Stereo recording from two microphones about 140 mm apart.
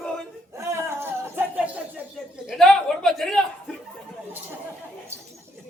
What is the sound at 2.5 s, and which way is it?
Speech, 5° left (ahead or behind).